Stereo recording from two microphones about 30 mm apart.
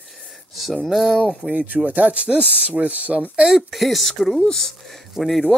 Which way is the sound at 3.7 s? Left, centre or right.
Centre.